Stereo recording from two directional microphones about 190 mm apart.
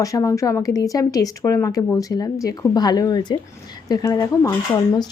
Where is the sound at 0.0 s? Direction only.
15° left (ahead or behind).